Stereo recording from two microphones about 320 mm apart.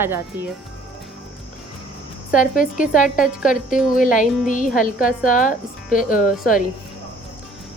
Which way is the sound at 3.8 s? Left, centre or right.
Centre.